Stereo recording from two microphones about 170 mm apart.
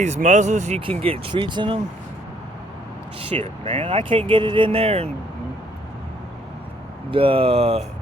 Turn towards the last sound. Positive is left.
turn(degrees=-35)  # may be behind; listen again after turning